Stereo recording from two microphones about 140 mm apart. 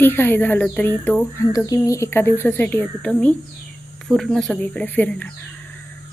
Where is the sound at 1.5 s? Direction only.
25° left (ahead or behind).